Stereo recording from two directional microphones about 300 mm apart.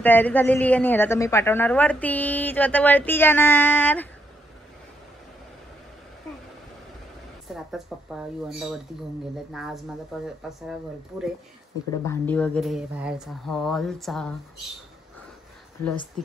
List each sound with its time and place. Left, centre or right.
0.0 s a woman's voice: centre
7.5 s a woman's voice: centre
11.9 s a woman's voice: centre